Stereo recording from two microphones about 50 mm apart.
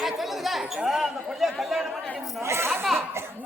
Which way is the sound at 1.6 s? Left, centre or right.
Centre.